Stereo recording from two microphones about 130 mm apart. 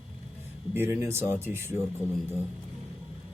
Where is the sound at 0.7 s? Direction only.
15° right (ahead or behind).